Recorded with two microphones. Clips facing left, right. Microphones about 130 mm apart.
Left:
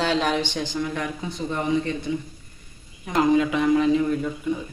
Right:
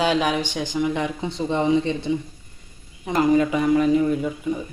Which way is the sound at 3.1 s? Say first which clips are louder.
Right 1 dB; 5° right (ahead or behind).